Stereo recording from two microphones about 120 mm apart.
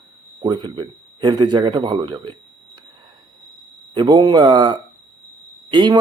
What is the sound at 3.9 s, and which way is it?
Speech, 40° right (ahead or behind).